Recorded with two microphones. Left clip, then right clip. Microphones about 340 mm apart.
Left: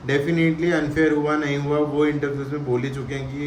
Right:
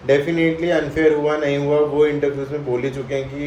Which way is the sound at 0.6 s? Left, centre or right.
Centre.